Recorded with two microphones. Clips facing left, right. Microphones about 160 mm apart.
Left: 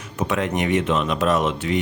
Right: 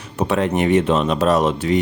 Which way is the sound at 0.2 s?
35° right (ahead or behind).